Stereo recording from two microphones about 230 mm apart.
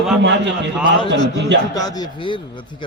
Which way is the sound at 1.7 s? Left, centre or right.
Centre.